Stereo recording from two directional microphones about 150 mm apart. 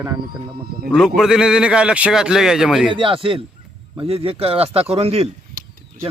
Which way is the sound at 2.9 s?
35° right (ahead or behind).